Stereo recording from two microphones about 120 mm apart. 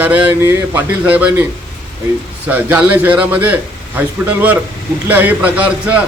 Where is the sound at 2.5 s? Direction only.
15° right (ahead or behind).